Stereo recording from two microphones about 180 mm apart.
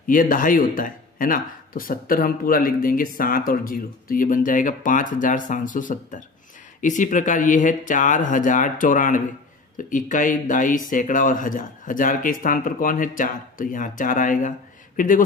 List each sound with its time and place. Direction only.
0.0 s speech: 50° left (ahead or behind)